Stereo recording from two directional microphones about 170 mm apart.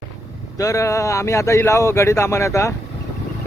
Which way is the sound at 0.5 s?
20° left (ahead or behind).